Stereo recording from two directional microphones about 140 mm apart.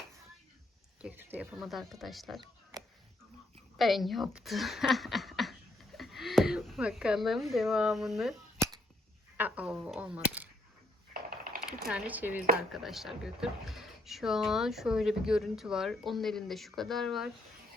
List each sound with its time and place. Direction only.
1.0 s speech: 15° right (ahead or behind)
1.6 s speech: centre (ahead or behind)
3.8 s speech: centre (ahead or behind)
9.4 s speech: 10° right (ahead or behind)
11.1 s mechanisms: 90° right
11.9 s speech: 10° right (ahead or behind)
12.7 s speech: centre (ahead or behind)